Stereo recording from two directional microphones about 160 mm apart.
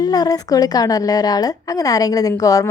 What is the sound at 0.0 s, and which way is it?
A woman's voice, 25° left (ahead or behind).